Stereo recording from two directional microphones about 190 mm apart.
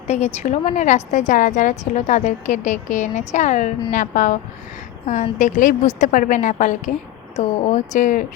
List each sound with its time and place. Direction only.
0.1 s a woman's voice: 40° left (ahead or behind)